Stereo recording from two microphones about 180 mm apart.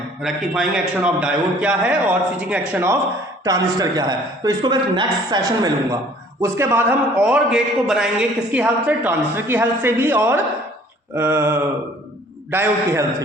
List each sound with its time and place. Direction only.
0.2 s a man's voice: 5° right (ahead or behind)